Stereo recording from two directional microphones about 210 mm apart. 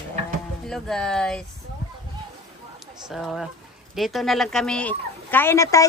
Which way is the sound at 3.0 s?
Centre (ahead or behind).